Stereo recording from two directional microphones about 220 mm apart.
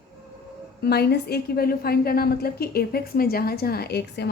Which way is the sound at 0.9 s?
45° left (ahead or behind).